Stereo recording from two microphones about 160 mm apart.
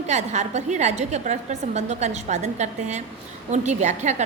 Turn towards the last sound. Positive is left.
turn(degrees=-45)  # may be behind; listen again after turning